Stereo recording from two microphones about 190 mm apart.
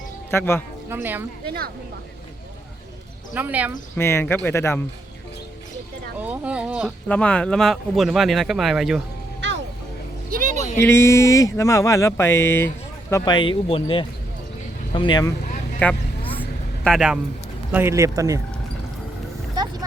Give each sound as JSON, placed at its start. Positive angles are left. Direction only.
{"t": 0.3, "sound": "speech", "side_deg": 10}
{"t": 0.9, "sound": "speech", "side_deg": -10}
{"t": 1.5, "sound": "speech", "side_deg": -55}
{"t": 3.3, "sound": "speech", "side_deg": -10}
{"t": 3.9, "sound": "speech", "side_deg": 15}
{"t": 6.1, "sound": "speech", "side_deg": -10}
{"t": 7.1, "sound": "speech", "side_deg": 5}
{"t": 9.4, "sound": "music", "side_deg": -70}
{"t": 10.3, "sound": "a sound", "side_deg": -40}
{"t": 10.8, "sound": "speech", "side_deg": 15}
{"t": 15.8, "sound": "vehicle", "side_deg": 10}
{"t": 17.7, "sound": "speech", "side_deg": -10}